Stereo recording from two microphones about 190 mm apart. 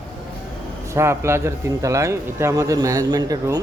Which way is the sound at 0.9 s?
15° right (ahead or behind).